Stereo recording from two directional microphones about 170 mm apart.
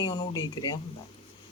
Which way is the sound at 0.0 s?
20° left (ahead or behind).